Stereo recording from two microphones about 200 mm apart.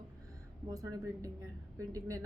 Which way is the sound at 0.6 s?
15° right (ahead or behind).